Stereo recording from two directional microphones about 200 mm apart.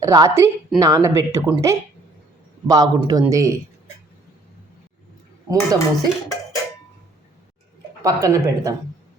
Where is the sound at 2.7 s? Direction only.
20° right (ahead or behind).